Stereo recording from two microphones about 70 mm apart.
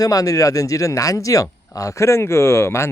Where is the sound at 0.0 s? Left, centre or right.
Left.